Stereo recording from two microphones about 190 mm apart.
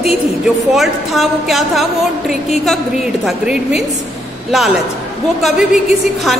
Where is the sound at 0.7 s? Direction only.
Centre (ahead or behind).